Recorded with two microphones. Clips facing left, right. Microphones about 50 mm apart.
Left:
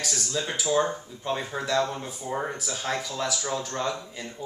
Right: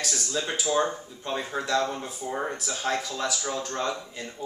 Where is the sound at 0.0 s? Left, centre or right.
Centre.